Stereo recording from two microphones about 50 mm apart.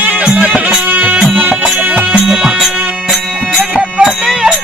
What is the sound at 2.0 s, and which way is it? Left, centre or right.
Music, right.